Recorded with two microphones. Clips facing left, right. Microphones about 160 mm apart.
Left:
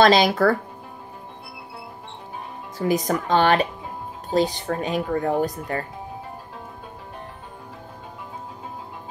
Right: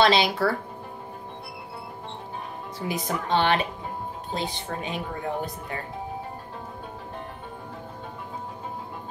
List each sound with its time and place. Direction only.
0.0 s speech: 45° left (ahead or behind)
2.9 s speech: 45° left (ahead or behind)